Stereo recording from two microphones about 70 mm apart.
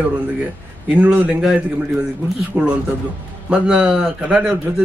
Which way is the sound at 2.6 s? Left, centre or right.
Centre.